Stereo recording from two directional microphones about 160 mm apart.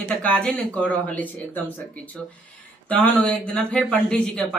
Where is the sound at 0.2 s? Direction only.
5° left (ahead or behind).